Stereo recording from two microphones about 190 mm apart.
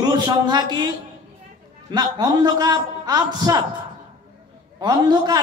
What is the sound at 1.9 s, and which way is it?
A man's voice, 20° right (ahead or behind).